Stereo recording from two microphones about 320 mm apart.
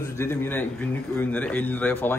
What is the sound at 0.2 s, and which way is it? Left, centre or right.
A man's voice, centre.